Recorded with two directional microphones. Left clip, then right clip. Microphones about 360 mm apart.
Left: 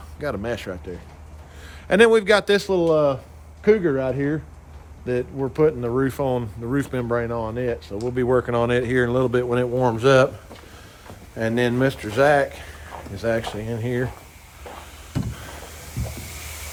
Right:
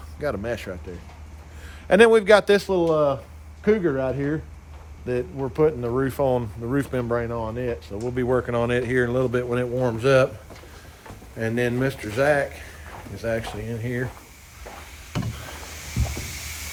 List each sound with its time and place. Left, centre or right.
0.2 s speech: centre
1.9 s speech: centre
11.3 s speech: centre